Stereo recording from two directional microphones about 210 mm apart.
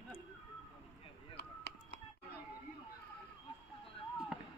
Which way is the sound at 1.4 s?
50° left (ahead or behind).